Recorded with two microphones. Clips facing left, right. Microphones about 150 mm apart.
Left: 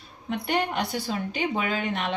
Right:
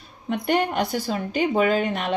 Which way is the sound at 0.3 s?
45° right (ahead or behind).